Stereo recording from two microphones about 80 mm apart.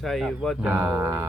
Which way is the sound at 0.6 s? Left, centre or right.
Right.